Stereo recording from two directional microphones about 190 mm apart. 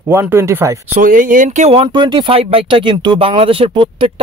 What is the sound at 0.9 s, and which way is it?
Speech, 45° right (ahead or behind).